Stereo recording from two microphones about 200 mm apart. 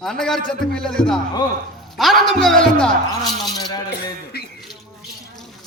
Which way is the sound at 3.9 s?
55° left (ahead or behind).